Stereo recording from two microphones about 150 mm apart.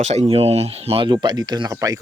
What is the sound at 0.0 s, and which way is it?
Speech, 45° right (ahead or behind).